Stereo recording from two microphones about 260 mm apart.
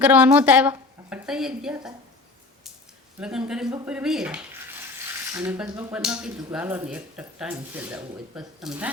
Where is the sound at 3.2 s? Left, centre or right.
Centre.